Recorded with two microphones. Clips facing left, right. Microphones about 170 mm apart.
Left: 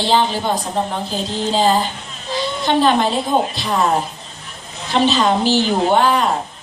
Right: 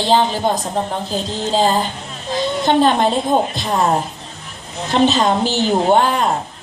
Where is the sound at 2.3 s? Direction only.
50° right (ahead or behind).